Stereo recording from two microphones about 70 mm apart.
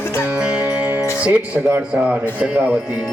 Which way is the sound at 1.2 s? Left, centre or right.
Right.